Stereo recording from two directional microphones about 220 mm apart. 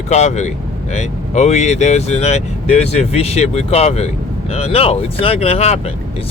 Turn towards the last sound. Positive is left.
turn(degrees=30)  # may be behind; listen again after turning